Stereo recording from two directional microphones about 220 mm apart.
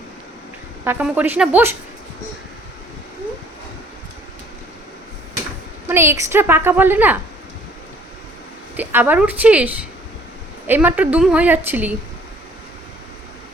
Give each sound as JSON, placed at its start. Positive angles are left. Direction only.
{"t": 0.9, "sound": "a woman's voice", "side_deg": -5}
{"t": 5.9, "sound": "a woman's voice", "side_deg": -10}
{"t": 8.7, "sound": "a woman's voice", "side_deg": -10}